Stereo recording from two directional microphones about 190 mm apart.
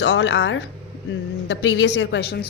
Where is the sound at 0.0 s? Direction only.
65° left (ahead or behind).